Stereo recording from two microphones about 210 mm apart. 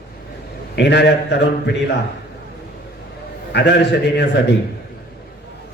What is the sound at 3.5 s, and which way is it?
Speech, 55° left (ahead or behind).